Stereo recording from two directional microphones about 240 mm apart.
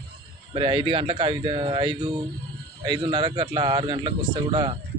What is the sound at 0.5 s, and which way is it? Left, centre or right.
Speech, right.